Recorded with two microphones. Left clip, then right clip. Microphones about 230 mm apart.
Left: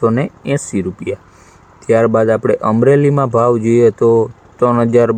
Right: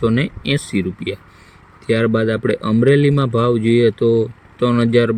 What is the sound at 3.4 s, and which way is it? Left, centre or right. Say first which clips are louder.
Speech: left 4 dB; right.